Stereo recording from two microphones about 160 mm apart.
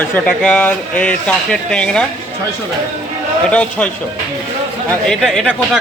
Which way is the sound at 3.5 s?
10° left (ahead or behind).